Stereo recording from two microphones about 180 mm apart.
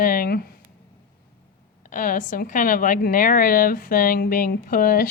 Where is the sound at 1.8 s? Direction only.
50° left (ahead or behind).